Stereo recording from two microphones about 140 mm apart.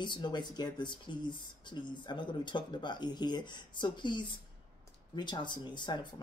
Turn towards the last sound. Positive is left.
turn(degrees=30)  # may be behind; listen again after turning